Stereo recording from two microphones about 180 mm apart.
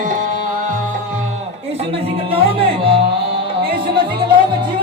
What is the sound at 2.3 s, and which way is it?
Music, 30° right (ahead or behind).